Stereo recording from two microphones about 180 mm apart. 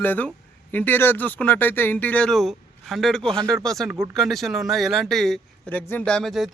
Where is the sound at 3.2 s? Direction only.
25° right (ahead or behind).